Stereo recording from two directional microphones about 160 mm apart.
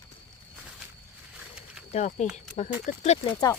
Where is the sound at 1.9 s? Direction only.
45° left (ahead or behind).